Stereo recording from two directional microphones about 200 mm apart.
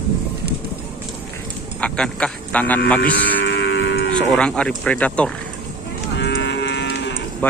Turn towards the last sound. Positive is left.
turn(degrees=10)  # may be behind; listen again after turning